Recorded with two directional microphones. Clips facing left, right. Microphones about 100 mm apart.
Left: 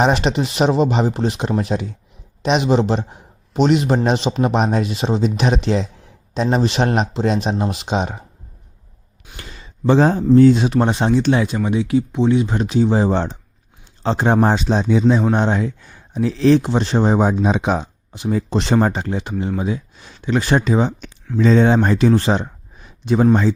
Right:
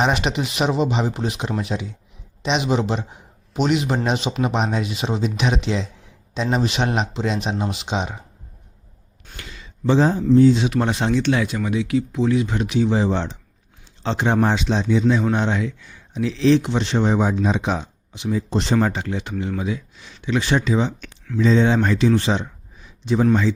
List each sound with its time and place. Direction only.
0.0 s a man's voice: 35° left (ahead or behind)
2.6 s speech: 35° left (ahead or behind)
9.4 s a sound: 35° left (ahead or behind)
9.8 s speech: 55° left (ahead or behind)
10.7 s speech: 30° left (ahead or behind); by 15.0 s 50° left (ahead or behind)
15.4 s speech: 35° left (ahead or behind)
17.4 s speech: 60° left (ahead or behind)
18.5 s speech: 75° left (ahead or behind)
18.8 s speech: 35° left (ahead or behind); by 23.2 s 55° left (ahead or behind)
23.2 s speech: 40° left (ahead or behind)